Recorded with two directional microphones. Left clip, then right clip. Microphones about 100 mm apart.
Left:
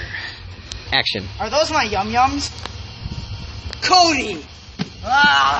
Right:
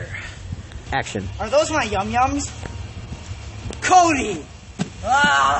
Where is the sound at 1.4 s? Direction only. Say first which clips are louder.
Left 1 dB; 20° right (ahead or behind).